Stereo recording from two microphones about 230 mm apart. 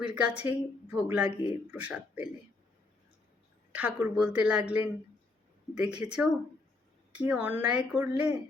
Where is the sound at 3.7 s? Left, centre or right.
Centre.